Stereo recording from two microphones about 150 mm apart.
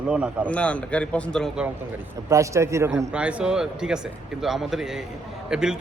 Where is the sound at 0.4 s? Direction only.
10° left (ahead or behind).